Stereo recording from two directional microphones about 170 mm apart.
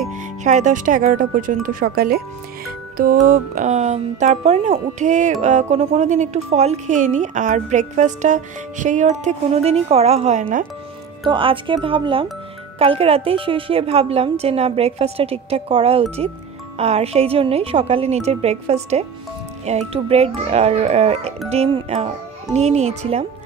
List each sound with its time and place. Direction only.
0.4 s a woman's voice: 45° right (ahead or behind)
11.2 s a woman's voice: 30° right (ahead or behind)